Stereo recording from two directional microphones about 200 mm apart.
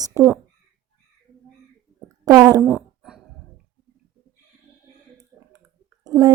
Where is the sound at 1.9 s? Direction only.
20° right (ahead or behind).